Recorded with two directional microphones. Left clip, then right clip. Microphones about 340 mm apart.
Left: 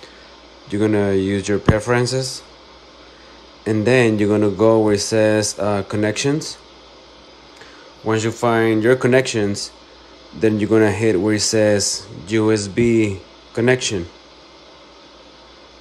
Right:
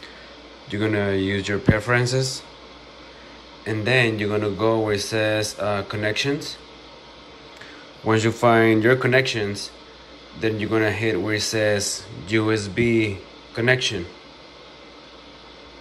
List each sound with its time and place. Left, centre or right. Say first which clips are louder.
0.7 s speech: left 5 dB; centre
3.6 s speech: left 5 dB; centre
8.0 s speech: even; centre